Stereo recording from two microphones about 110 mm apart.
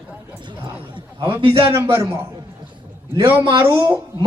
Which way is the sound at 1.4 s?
50° right (ahead or behind).